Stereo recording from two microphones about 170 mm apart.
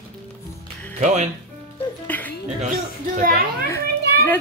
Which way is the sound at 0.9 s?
45° right (ahead or behind).